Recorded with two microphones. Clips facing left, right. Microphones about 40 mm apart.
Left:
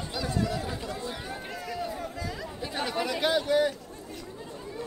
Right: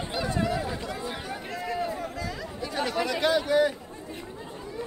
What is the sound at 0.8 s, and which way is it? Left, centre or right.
Chatter, right.